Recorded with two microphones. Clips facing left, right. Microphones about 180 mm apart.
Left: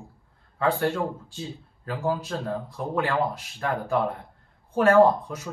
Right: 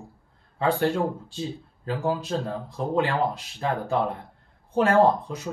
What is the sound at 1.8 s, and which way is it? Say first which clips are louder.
Speech: right 1 dB; 25° right (ahead or behind).